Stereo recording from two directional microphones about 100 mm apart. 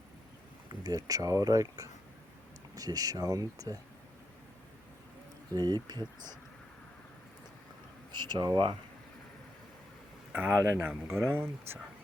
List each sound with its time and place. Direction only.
0.7 s speech: 40° right (ahead or behind)
5.5 s speech: 45° right (ahead or behind)
8.1 s speech: 45° right (ahead or behind)
10.3 s speech: 20° right (ahead or behind)